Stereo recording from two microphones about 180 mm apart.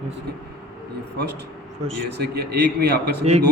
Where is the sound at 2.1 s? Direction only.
65° right (ahead or behind).